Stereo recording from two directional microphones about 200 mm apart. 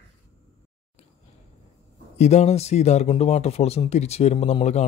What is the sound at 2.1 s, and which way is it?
A man's voice, 35° left (ahead or behind).